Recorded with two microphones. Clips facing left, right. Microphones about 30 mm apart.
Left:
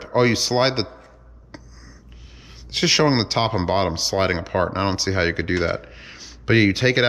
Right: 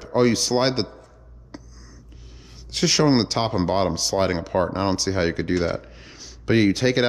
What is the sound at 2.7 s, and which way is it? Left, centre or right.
Speech, left.